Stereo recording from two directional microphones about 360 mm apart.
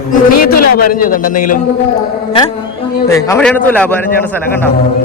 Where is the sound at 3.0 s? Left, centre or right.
Centre.